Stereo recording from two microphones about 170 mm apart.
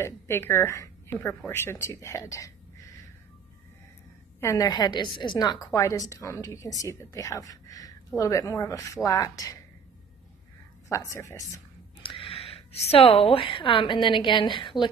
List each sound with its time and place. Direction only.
0.0 s a woman's voice: 15° left (ahead or behind)
4.4 s a woman's voice: 20° left (ahead or behind)
10.9 s a woman's voice: 20° left (ahead or behind)
12.0 s a woman's voice: 30° left (ahead or behind)